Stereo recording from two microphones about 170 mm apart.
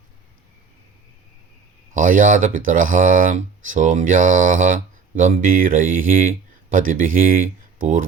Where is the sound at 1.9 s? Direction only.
50° right (ahead or behind).